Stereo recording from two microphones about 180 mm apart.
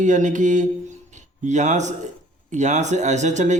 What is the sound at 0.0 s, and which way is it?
Speech, 45° right (ahead or behind).